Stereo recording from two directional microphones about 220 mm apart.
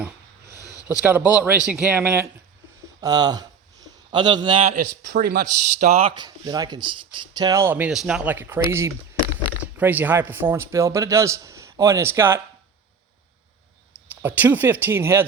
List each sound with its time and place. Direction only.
0.6 s a sound: 15° left (ahead or behind)
1.0 s speech: 5° right (ahead or behind)
3.0 s a man's voice: 20° right (ahead or behind)
5.0 s speech: 45° right (ahead or behind)
5.6 s speech: 30° right (ahead or behind); by 12.4 s 10° right (ahead or behind)
14.2 s speech: 10° right (ahead or behind)